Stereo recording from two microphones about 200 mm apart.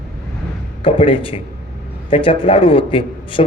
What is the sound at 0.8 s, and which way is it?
A man's voice, 25° left (ahead or behind).